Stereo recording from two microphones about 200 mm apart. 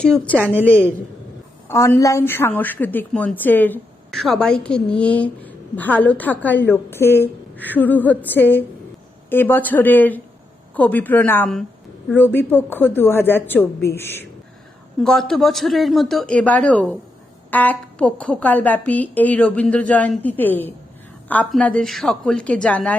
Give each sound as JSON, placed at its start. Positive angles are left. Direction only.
{"t": 0.0, "sound": "speech", "side_deg": 5}
{"t": 0.4, "sound": "a woman's voice", "side_deg": -10}
{"t": 1.6, "sound": "a woman's voice", "side_deg": 15}